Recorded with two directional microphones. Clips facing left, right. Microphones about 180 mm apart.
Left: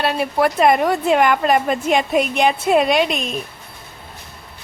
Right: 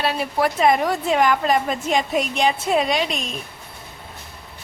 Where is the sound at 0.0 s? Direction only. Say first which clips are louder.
Left 3 dB; 60° left (ahead or behind).